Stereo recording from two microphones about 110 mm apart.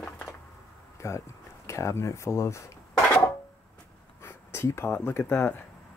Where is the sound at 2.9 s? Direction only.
10° left (ahead or behind).